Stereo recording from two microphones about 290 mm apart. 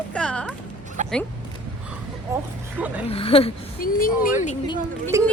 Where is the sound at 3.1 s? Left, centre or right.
Centre.